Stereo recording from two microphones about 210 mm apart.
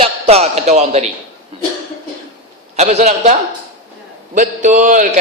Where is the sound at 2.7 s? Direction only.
30° right (ahead or behind).